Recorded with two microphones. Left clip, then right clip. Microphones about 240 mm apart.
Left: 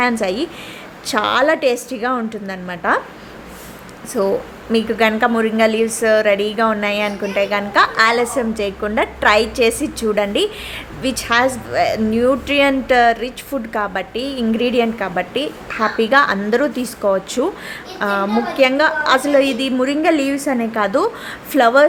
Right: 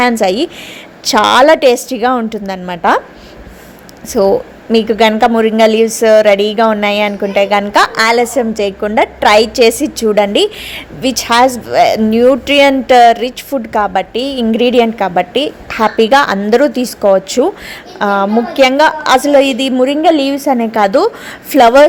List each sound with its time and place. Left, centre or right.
0.0 s a woman's voice: right
4.1 s a woman's voice: centre